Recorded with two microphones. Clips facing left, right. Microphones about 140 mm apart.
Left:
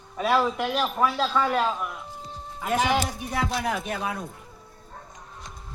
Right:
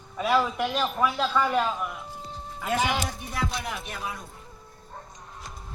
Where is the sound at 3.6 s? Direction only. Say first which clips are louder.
Left 6 dB; 55° left (ahead or behind).